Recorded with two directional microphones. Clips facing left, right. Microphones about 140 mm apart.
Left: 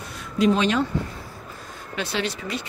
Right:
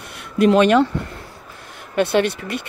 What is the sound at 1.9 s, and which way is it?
Speech, 55° right (ahead or behind).